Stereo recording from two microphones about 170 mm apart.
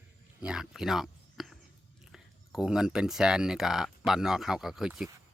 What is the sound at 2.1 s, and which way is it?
Speech, 5° right (ahead or behind).